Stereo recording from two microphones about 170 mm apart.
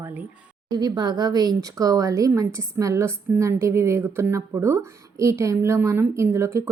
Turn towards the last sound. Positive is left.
turn(degrees=-15)  # may be behind; listen again after turning